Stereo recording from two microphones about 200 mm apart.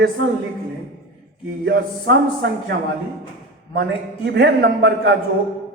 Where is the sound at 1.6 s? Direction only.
60° right (ahead or behind).